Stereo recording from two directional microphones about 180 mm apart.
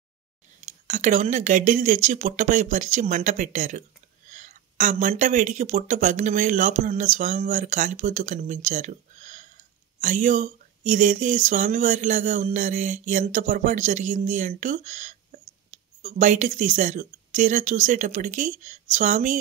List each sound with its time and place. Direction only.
0.7 s speech: 45° right (ahead or behind)